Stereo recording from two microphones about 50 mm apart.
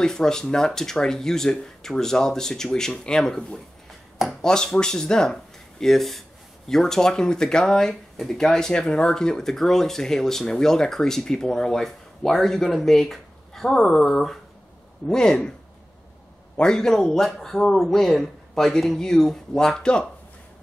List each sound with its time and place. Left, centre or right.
0.0 s speech: centre
16.5 s speech: centre